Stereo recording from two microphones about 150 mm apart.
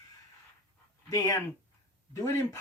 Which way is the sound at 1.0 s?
20° left (ahead or behind).